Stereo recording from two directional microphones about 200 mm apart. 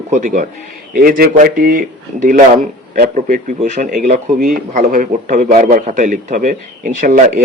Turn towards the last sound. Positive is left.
turn(degrees=-45)  # may be behind; listen again after turning